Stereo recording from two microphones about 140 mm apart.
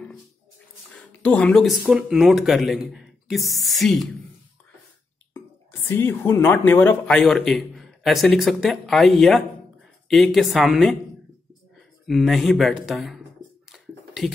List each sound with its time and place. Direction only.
0.9 s speech: 10° left (ahead or behind)
5.3 s speech: 15° left (ahead or behind)
7.2 s speech: centre (ahead or behind)
12.1 s speech: centre (ahead or behind)
13.7 s a sound: centre (ahead or behind)